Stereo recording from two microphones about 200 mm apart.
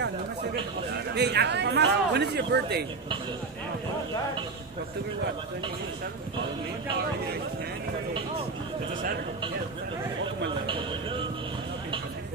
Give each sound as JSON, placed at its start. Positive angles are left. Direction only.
{"t": 0.9, "sound": "a man's voice", "side_deg": -55}
{"t": 10.7, "sound": "speech", "side_deg": -25}